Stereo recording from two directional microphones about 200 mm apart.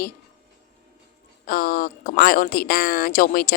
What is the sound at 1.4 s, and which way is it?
Speech, 45° left (ahead or behind).